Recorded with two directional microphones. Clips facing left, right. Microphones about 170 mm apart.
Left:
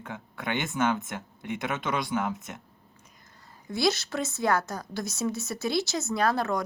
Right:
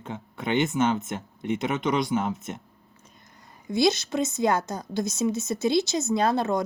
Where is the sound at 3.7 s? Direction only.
20° right (ahead or behind).